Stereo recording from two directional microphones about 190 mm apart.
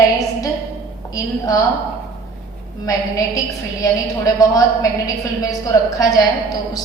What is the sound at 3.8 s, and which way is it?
A woman's voice, 20° left (ahead or behind).